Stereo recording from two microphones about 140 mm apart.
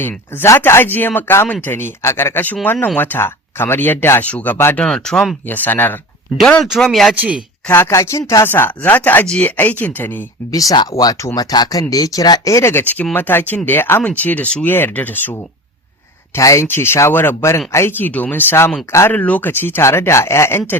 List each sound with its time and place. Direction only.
0.0 s speech: 15° left (ahead or behind)
5.5 s speech: 15° left (ahead or behind)
6.3 s a woman's voice: 5° left (ahead or behind)
7.7 s speech: 20° left (ahead or behind)
10.5 s speech: 25° left (ahead or behind)